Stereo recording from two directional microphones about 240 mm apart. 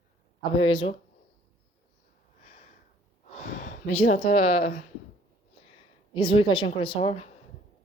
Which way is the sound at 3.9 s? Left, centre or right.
Left.